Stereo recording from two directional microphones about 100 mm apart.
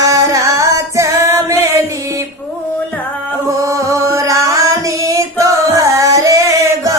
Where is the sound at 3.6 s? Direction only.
35° right (ahead or behind).